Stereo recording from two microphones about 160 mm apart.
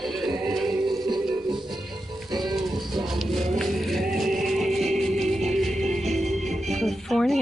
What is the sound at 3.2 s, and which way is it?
Music, centre (ahead or behind).